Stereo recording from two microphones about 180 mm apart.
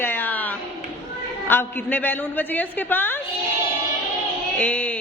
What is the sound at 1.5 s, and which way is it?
A woman's voice, 10° left (ahead or behind).